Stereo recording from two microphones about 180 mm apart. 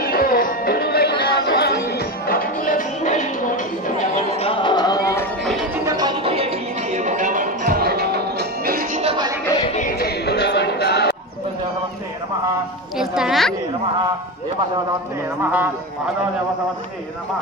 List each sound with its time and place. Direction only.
0.0 s music: 55° left (ahead or behind)
4.4 s music: 30° left (ahead or behind)
5.4 s music: centre (ahead or behind)
5.9 s music: 20° right (ahead or behind); by 9.0 s 55° right (ahead or behind)
9.0 s music: 30° right (ahead or behind)
9.8 s music: 55° left (ahead or behind)
12.9 s music: 5° right (ahead or behind)